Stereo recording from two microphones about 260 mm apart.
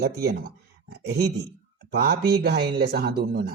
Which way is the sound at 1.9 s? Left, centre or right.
Right.